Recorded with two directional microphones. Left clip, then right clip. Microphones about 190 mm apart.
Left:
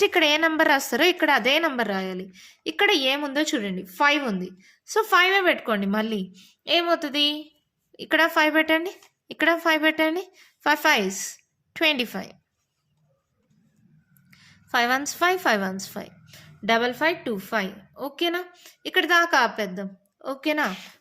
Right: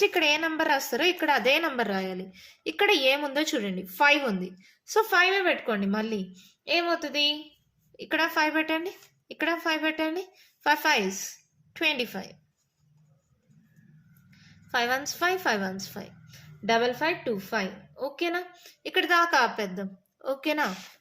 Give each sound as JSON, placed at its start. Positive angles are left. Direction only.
{"t": 0.0, "sound": "a woman's voice", "side_deg": 40}
{"t": 14.3, "sound": "a woman's voice", "side_deg": 40}